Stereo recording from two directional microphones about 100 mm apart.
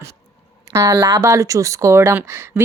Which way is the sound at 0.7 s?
30° right (ahead or behind).